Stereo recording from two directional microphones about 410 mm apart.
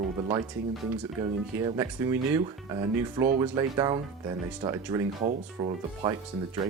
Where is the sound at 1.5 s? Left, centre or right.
Centre.